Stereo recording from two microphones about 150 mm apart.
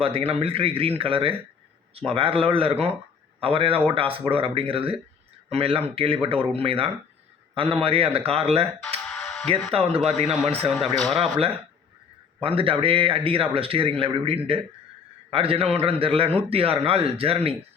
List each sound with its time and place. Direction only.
0.0 s a man's voice: 40° right (ahead or behind)
9.1 s music: centre (ahead or behind)
9.7 s a man's voice: 40° right (ahead or behind)
10.2 s speech: centre (ahead or behind)
12.4 s a man's voice: 35° right (ahead or behind)